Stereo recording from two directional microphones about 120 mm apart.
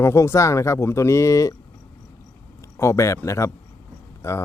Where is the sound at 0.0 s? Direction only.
20° left (ahead or behind).